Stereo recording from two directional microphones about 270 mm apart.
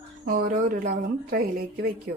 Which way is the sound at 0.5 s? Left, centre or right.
Right.